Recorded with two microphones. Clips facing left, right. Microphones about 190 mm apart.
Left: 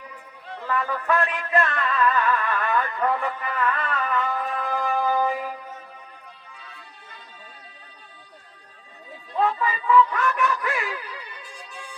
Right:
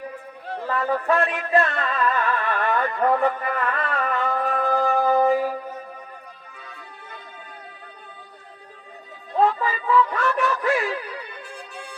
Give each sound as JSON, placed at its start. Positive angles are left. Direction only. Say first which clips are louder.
{"t": 0.0, "sound": "a sound", "louder": "right 8 dB", "side_deg": -55}
{"t": 1.0, "sound": "a sound", "louder": "right 2 dB", "side_deg": -35}
{"t": 3.2, "sound": "a man's voice", "louder": "right 7 dB", "side_deg": -55}
{"t": 3.4, "sound": "music", "louder": "right 1 dB", "side_deg": -40}
{"t": 6.7, "sound": "music", "louder": "right 5 dB", "side_deg": -55}
{"t": 9.3, "sound": "music", "louder": "right 3 dB", "side_deg": -35}
{"t": 11.0, "sound": "music", "louder": "right 5 dB", "side_deg": -55}